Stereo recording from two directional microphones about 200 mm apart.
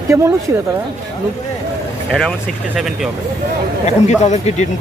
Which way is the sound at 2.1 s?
Centre (ahead or behind).